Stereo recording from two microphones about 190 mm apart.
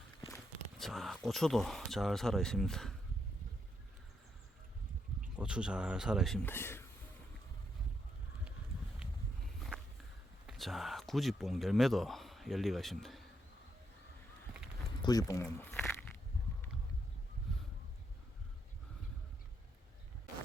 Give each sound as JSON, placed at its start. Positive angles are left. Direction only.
{"t": 0.3, "sound": "speech", "side_deg": 0}
{"t": 5.4, "sound": "speech", "side_deg": -5}
{"t": 6.4, "sound": "speech", "side_deg": 10}
{"t": 9.6, "sound": "walk", "side_deg": 0}
{"t": 10.4, "sound": "speech", "side_deg": 0}
{"t": 15.0, "sound": "speech", "side_deg": 20}
{"t": 15.7, "sound": "a sound", "side_deg": 5}